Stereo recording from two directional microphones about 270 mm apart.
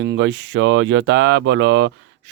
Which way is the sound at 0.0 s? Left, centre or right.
Right.